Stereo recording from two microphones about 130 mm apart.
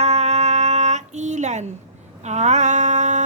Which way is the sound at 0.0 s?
55° right (ahead or behind).